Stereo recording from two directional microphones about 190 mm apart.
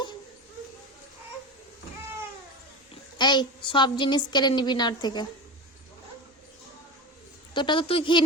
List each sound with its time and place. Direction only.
2.9 s a woman's voice: 25° left (ahead or behind)
7.5 s a woman's voice: 25° left (ahead or behind)